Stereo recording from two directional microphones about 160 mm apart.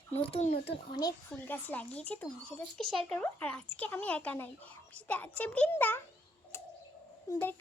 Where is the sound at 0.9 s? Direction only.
25° left (ahead or behind).